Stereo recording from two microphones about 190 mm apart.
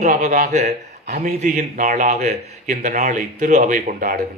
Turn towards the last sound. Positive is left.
turn(degrees=-45)  # may be behind; listen again after turning